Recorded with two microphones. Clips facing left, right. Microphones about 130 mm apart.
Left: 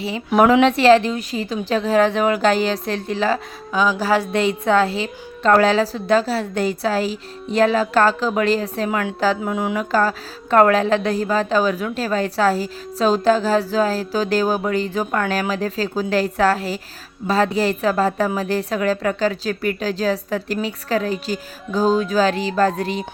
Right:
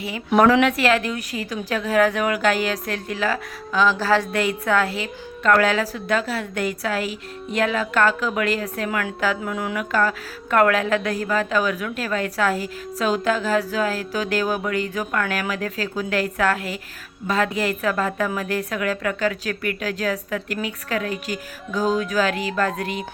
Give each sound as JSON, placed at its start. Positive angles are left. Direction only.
{"t": 0.4, "sound": "a woman's voice", "side_deg": 20}
{"t": 3.8, "sound": "speech", "side_deg": 15}
{"t": 4.4, "sound": "a woman's voice", "side_deg": 25}